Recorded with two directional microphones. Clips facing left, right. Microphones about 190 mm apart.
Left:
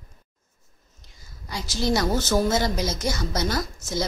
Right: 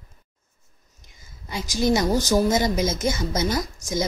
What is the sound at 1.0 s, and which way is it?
A woman's voice, 20° right (ahead or behind).